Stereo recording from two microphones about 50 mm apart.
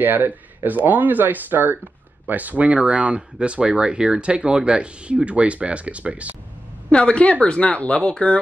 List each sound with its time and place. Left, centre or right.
0.0 s speech: right
6.9 s speech: left